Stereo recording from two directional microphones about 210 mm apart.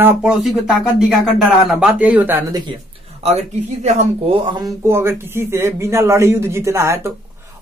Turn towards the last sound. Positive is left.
turn(degrees=-15)  # may be behind; listen again after turning